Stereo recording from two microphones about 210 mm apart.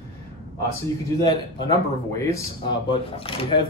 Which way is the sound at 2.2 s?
15° left (ahead or behind).